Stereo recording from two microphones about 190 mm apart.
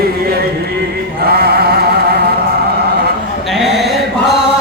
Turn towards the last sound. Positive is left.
turn(degrees=0)  # may be behind; listen again after turning